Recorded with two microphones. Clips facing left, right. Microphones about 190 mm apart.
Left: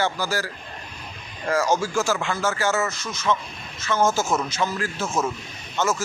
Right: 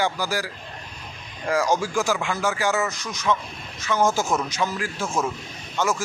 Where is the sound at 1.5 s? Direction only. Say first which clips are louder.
Even; 15° right (ahead or behind).